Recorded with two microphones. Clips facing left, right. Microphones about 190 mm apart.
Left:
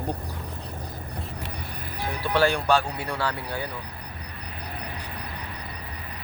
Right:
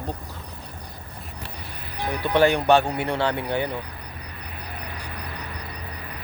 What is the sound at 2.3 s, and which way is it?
Speech, 20° right (ahead or behind).